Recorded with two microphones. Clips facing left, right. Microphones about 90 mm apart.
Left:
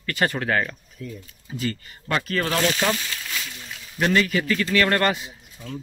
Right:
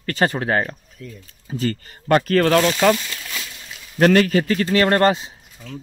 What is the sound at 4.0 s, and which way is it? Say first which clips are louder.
Speech: right 6 dB; 50° right (ahead or behind).